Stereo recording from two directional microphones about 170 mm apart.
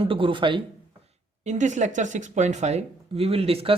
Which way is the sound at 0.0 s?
30° right (ahead or behind).